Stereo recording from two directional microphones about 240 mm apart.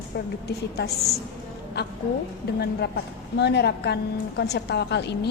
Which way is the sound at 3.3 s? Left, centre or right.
Left.